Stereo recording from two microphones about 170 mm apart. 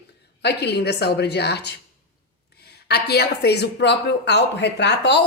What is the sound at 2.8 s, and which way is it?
A woman's voice, 70° left (ahead or behind).